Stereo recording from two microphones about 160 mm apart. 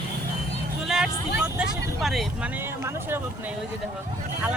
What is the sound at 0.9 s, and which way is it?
Vehicle, 5° right (ahead or behind).